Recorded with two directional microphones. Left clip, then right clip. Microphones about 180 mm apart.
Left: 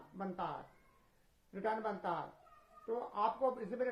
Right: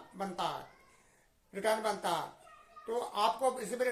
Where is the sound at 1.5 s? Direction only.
20° right (ahead or behind).